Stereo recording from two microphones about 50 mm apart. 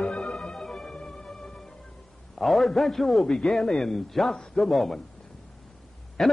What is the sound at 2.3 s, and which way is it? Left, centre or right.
A man's voice, centre.